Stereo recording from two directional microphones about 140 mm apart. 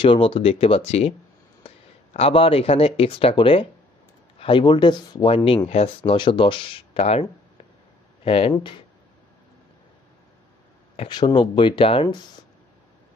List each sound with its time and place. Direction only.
0.0 s speech: 40° left (ahead or behind)
2.1 s speech: 45° left (ahead or behind)
11.1 s speech: 30° left (ahead or behind)